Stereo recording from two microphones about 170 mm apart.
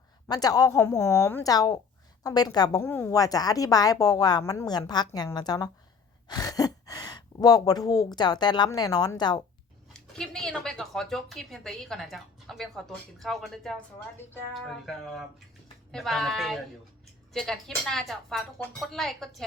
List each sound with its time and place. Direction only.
0.3 s a woman's voice: 20° left (ahead or behind)
9.9 s speech: 5° left (ahead or behind)